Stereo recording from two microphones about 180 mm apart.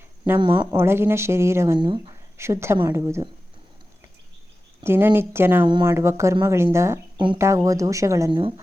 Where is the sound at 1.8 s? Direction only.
25° right (ahead or behind).